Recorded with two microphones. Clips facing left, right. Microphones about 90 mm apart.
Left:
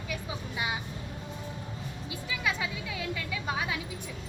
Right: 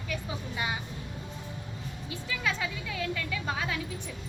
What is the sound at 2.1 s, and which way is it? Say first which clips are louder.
A woman's voice: even; 15° left (ahead or behind).